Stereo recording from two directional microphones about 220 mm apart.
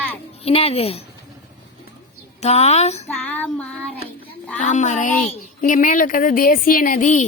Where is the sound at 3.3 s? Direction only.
5° left (ahead or behind).